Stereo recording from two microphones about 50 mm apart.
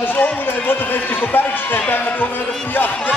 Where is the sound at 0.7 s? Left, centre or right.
Left.